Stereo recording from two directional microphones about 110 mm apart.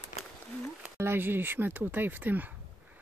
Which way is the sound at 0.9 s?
20° right (ahead or behind).